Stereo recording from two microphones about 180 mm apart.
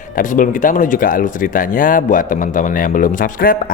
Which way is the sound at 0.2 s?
45° left (ahead or behind).